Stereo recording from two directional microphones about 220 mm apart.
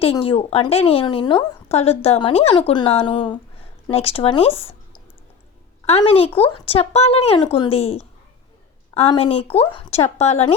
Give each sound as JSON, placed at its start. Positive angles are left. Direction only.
{"t": 0.0, "sound": "a woman's voice", "side_deg": 25}
{"t": 5.8, "sound": "a woman's voice", "side_deg": 30}